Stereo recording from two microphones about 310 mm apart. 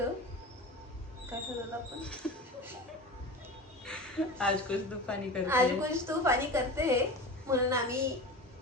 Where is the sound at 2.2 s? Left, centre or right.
Centre.